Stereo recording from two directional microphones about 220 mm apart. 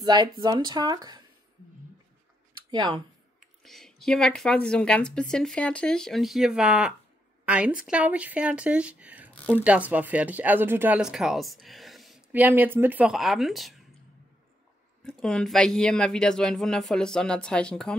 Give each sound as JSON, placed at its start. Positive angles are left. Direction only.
{"t": 0.0, "sound": "speech", "side_deg": -20}
{"t": 2.7, "sound": "speech", "side_deg": -20}
{"t": 3.3, "sound": "speech", "side_deg": 0}
{"t": 15.0, "sound": "speech", "side_deg": 5}